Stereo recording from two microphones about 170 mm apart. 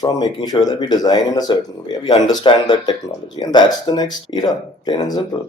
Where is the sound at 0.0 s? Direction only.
25° left (ahead or behind).